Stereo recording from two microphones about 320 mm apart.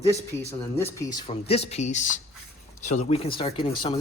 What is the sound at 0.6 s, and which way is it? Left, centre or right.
Speech, centre.